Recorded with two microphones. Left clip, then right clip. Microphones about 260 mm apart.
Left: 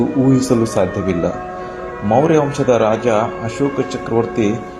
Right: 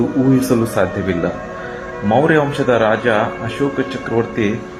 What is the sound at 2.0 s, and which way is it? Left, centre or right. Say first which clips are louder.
Speech: even; centre.